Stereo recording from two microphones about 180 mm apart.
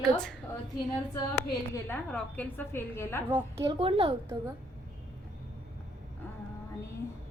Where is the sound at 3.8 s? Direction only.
30° right (ahead or behind).